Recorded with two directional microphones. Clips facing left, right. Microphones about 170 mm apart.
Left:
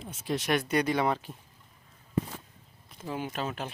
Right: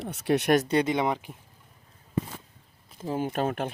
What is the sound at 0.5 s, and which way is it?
Speech, 30° right (ahead or behind).